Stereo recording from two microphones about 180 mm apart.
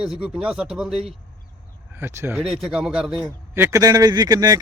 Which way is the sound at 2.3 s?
Centre (ahead or behind).